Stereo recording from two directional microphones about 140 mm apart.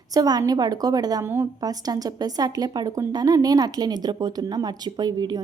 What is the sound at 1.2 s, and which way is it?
A woman's voice, 15° right (ahead or behind).